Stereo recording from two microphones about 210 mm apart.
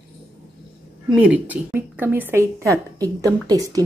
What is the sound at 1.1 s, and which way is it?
A woman's voice, 5° right (ahead or behind).